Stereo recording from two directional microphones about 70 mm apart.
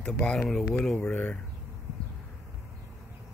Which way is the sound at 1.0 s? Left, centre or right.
Left.